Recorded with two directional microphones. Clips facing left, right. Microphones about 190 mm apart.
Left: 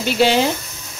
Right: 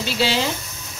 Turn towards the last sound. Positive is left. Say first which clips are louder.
# left 6 dB
turn(degrees=50)  # may be behind; listen again after turning